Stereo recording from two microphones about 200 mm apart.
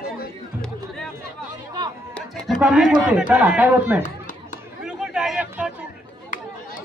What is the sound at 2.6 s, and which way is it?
Speech, 5° right (ahead or behind).